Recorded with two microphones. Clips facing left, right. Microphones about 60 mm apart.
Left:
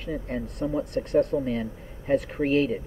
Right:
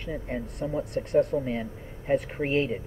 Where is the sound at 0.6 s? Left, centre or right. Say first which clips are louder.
Left 3 dB; centre.